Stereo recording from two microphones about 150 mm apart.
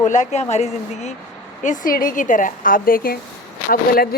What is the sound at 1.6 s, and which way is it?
Speech, 60° left (ahead or behind).